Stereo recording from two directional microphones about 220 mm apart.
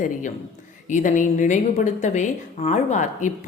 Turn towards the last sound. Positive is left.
turn(degrees=35)  # may be behind; listen again after turning